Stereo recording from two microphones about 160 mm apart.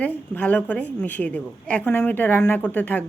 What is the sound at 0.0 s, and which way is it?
A woman's voice, 10° left (ahead or behind).